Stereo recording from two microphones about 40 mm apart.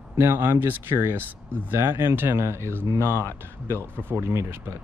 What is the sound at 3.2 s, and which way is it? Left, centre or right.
Speech, left.